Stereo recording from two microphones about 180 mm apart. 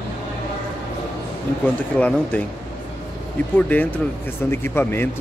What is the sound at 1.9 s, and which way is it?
Speech, 10° left (ahead or behind).